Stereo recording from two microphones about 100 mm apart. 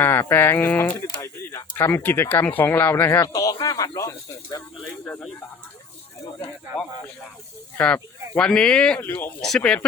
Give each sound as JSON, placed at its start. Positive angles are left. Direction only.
{"t": 0.0, "sound": "speech", "side_deg": 20}
{"t": 3.3, "sound": "speech", "side_deg": 35}
{"t": 3.9, "sound": "speech", "side_deg": 30}
{"t": 7.8, "sound": "speech", "side_deg": 10}
{"t": 9.0, "sound": "speech", "side_deg": 20}
{"t": 9.4, "sound": "speech", "side_deg": 5}